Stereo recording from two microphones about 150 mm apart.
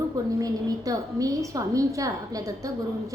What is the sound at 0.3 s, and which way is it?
A woman's voice, 25° right (ahead or behind).